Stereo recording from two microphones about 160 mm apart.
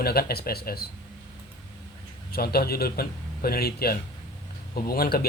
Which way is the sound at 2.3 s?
70° left (ahead or behind).